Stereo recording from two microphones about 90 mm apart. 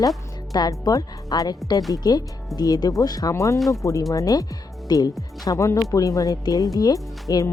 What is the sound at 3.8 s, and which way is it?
Speech, 35° left (ahead or behind).